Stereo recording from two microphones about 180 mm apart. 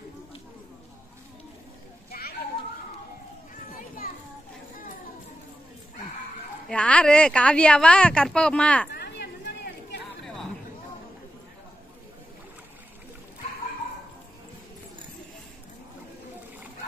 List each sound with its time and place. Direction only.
2.0 s children playing: 55° left (ahead or behind)
4.0 s children playing: 50° left (ahead or behind)
6.7 s speech: 5° left (ahead or behind)
8.9 s a sound: 65° left (ahead or behind)